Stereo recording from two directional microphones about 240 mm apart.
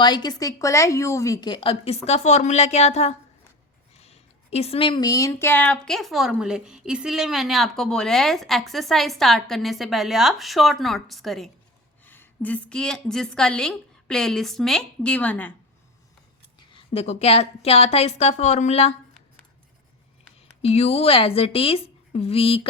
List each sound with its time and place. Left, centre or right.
0.0 s a woman's voice: centre
16.6 s a woman's voice: left
20.6 s a woman's voice: left